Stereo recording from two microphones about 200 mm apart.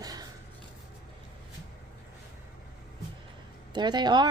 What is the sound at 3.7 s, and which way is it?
Speech, 20° right (ahead or behind).